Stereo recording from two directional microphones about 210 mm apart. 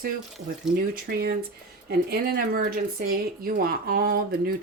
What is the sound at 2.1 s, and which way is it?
Speech, 45° right (ahead or behind).